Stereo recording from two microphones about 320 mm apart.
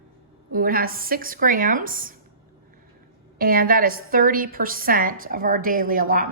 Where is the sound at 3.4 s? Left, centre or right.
Right.